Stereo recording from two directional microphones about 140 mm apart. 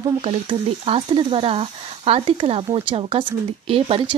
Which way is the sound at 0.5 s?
40° right (ahead or behind).